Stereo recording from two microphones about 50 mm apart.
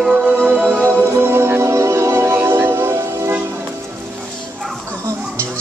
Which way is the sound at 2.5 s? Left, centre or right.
Right.